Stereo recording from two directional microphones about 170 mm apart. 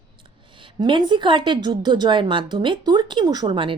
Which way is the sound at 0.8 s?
25° right (ahead or behind).